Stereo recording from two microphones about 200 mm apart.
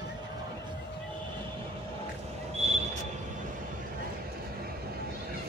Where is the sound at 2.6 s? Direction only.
35° right (ahead or behind).